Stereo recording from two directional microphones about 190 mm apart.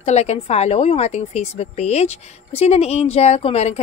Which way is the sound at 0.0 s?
35° left (ahead or behind).